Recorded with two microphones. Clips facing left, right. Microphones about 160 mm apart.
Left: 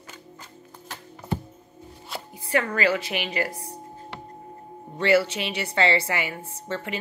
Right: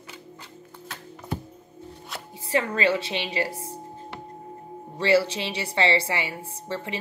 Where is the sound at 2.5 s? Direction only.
25° right (ahead or behind).